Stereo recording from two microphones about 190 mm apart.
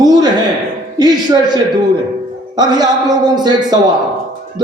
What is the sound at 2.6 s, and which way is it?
A man's voice, 20° right (ahead or behind).